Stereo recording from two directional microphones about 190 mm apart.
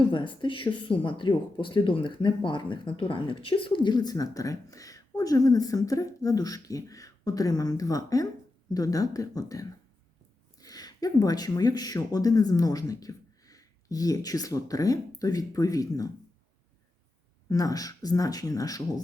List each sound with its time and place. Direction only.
0.1 s speech: 25° left (ahead or behind)
17.5 s speech: 20° left (ahead or behind)